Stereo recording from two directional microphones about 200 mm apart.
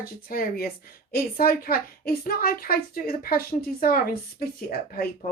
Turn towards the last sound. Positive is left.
turn(degrees=50)  # may be behind; listen again after turning